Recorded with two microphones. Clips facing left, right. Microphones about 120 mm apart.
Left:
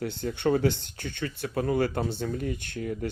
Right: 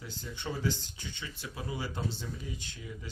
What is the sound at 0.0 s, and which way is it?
Speech, 65° left (ahead or behind).